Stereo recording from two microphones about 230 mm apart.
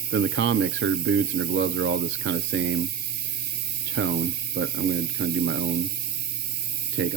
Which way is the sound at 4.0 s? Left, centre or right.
Right.